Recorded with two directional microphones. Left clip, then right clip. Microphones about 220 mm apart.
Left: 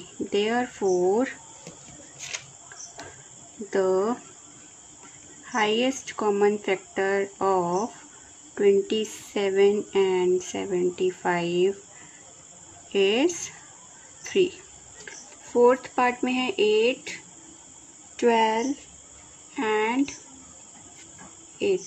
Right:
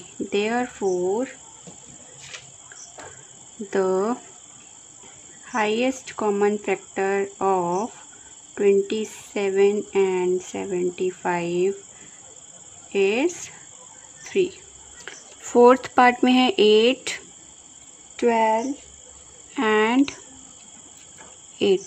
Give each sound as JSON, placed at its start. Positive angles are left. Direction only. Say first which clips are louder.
{"t": 0.3, "sound": "speech", "louder": "right 1 dB", "side_deg": -10}
{"t": 3.7, "sound": "speech", "louder": "right 1 dB", "side_deg": -15}
{"t": 5.4, "sound": "speech", "louder": "right 1 dB", "side_deg": -10}
{"t": 12.9, "sound": "speech", "louder": "right 1 dB", "side_deg": -5}
{"t": 14.2, "sound": "cricket", "louder": "even", "side_deg": -5}
{"t": 15.5, "sound": "speech", "louder": "right 5 dB", "side_deg": -35}
{"t": 18.1, "sound": "speech", "louder": "right 2 dB", "side_deg": -15}
{"t": 19.5, "sound": "speech", "louder": "right 5 dB", "side_deg": -30}